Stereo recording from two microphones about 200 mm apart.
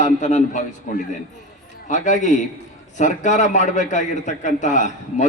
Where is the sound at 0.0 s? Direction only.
35° left (ahead or behind).